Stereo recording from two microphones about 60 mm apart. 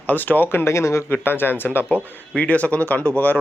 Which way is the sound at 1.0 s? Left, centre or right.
Left.